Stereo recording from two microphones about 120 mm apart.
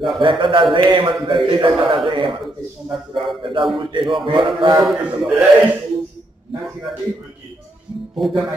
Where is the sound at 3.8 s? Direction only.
40° right (ahead or behind).